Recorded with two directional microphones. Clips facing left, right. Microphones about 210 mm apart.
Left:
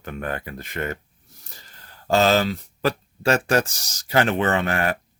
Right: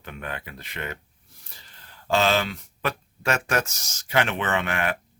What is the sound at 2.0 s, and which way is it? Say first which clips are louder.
Speech: left 4 dB; 40° left (ahead or behind).